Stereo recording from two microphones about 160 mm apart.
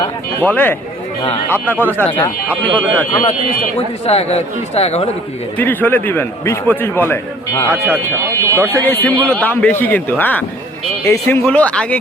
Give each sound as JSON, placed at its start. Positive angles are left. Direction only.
{"t": 0.0, "sound": "a man's voice", "side_deg": 10}
{"t": 3.8, "sound": "speech", "side_deg": 40}
{"t": 5.5, "sound": "a man's voice", "side_deg": 10}